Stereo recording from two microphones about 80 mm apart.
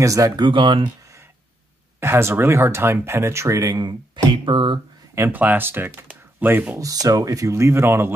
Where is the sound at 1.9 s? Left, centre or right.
Right.